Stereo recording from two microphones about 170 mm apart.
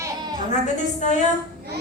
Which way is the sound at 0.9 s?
45° left (ahead or behind).